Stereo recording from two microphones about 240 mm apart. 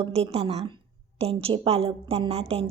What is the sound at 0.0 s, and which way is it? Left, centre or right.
A woman's voice, right.